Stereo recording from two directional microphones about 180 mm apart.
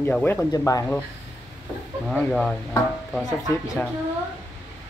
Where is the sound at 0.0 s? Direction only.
10° left (ahead or behind).